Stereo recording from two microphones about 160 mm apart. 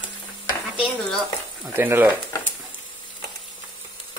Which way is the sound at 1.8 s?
15° right (ahead or behind).